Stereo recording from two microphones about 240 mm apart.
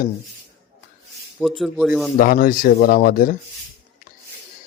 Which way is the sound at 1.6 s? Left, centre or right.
Centre.